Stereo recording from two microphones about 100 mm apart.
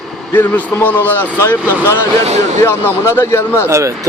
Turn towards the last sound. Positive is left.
turn(degrees=-30)  # may be behind; listen again after turning